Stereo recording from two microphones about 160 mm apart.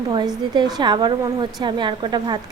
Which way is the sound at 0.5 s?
25° right (ahead or behind).